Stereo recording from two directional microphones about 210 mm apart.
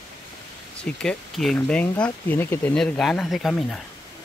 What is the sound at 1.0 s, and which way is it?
Speech, 5° left (ahead or behind).